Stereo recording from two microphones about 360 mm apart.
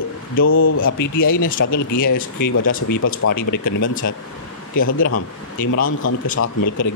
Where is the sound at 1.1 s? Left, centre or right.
Left.